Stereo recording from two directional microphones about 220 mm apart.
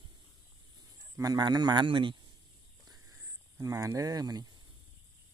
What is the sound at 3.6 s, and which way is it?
Speech, 15° right (ahead or behind).